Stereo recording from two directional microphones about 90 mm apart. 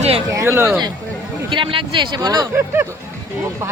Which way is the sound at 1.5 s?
70° right (ahead or behind).